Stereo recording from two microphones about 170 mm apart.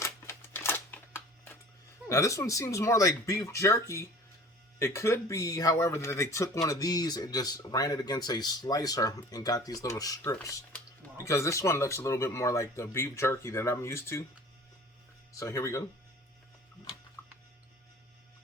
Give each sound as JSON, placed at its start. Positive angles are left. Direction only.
{"t": 0.0, "sound": "a sound", "side_deg": 15}
{"t": 2.0, "sound": "speech", "side_deg": 20}
{"t": 15.3, "sound": "speech", "side_deg": 20}